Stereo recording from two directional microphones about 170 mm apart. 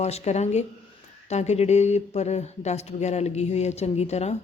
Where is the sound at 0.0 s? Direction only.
40° left (ahead or behind).